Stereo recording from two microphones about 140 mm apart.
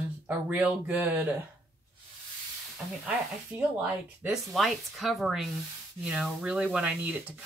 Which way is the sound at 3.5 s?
10° right (ahead or behind).